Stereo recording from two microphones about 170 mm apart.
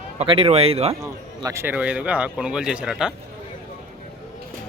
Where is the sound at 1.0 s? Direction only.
20° right (ahead or behind); by 3.1 s 5° right (ahead or behind).